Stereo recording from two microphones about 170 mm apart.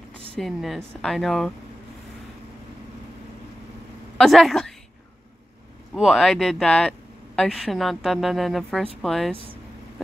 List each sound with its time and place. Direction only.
0.4 s speech: centre (ahead or behind)
4.2 s speech: centre (ahead or behind)
5.9 s speech: centre (ahead or behind)